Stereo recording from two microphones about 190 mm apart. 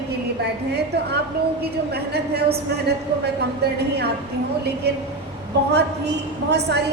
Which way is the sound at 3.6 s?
60° right (ahead or behind).